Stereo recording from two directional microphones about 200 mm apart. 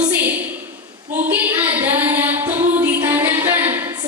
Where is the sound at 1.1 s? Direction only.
10° right (ahead or behind).